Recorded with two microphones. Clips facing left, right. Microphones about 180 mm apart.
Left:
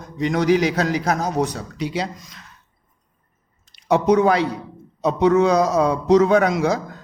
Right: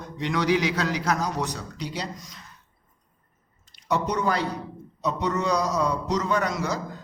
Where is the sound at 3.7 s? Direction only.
75° left (ahead or behind).